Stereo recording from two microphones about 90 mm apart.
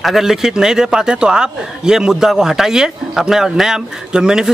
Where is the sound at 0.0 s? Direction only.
5° right (ahead or behind).